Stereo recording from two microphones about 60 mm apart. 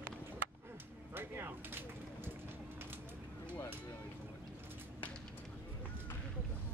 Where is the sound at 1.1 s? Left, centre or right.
Right.